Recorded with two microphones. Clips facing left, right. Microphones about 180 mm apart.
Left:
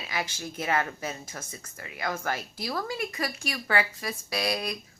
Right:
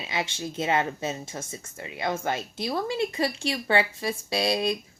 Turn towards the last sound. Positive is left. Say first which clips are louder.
# right 5 dB
turn(degrees=-25)  # may be behind; listen again after turning